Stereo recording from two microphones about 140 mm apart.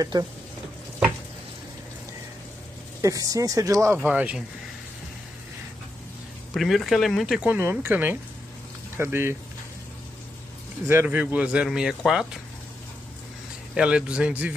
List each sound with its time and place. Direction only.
0.0 s speech: 25° right (ahead or behind)
3.0 s speech: 25° right (ahead or behind)
4.0 s a man's voice: 10° right (ahead or behind)
6.5 s a man's voice: centre (ahead or behind); by 9.4 s 15° right (ahead or behind)
10.9 s a man's voice: 15° right (ahead or behind)
13.7 s a man's voice: 5° right (ahead or behind)